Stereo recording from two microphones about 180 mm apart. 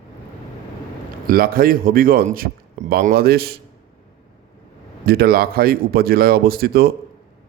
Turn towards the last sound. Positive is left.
turn(degrees=-60)  # may be behind; listen again after turning